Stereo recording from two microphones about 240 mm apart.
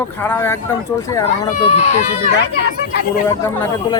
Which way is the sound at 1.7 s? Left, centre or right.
Left.